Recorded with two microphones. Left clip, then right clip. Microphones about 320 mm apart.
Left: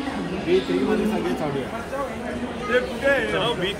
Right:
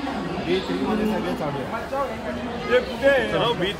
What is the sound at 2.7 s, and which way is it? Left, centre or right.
Speech, right.